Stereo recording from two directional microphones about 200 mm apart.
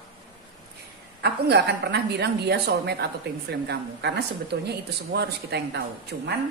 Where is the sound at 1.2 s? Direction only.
55° right (ahead or behind).